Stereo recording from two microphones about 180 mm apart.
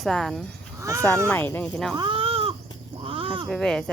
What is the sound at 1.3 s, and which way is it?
Speech, 15° left (ahead or behind).